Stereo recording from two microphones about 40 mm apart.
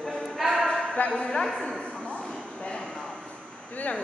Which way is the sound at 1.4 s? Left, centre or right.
Centre.